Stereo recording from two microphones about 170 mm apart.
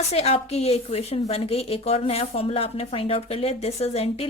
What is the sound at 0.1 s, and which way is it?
A woman's voice, 35° left (ahead or behind).